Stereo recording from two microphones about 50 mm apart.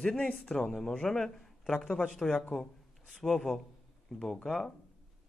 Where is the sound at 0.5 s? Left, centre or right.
Centre.